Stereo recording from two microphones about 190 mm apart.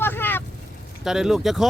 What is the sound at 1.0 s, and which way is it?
Speech, centre (ahead or behind).